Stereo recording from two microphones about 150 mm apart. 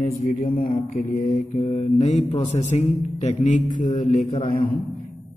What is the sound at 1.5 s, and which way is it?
A man's voice, 45° left (ahead or behind).